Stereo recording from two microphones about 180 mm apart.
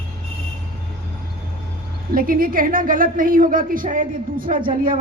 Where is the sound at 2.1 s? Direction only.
50° right (ahead or behind).